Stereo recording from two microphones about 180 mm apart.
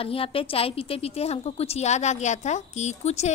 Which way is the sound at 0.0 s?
30° left (ahead or behind).